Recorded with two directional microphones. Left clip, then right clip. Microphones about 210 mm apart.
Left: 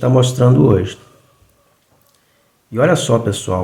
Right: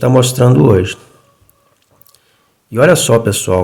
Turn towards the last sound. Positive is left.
turn(degrees=-40)  # may be behind; listen again after turning